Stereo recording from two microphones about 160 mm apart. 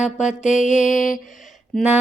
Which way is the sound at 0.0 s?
50° left (ahead or behind).